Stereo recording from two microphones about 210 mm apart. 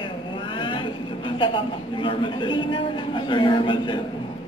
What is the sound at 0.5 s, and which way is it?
A woman's voice, 25° left (ahead or behind).